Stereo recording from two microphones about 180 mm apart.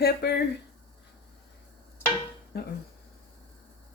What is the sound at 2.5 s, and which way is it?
Speech, 60° left (ahead or behind).